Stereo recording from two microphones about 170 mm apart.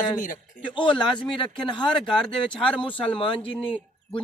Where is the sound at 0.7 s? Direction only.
30° left (ahead or behind).